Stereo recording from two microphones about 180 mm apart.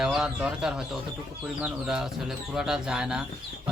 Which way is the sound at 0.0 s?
5° right (ahead or behind).